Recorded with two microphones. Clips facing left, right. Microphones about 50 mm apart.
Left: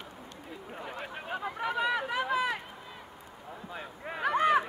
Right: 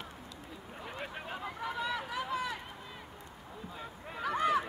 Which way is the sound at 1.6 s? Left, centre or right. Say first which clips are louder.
Left 6 dB; left.